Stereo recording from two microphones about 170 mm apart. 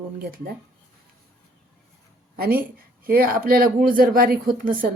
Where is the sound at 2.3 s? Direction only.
60° right (ahead or behind).